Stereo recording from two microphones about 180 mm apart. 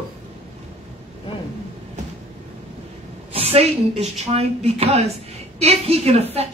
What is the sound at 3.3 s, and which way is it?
A woman's voice, 35° right (ahead or behind).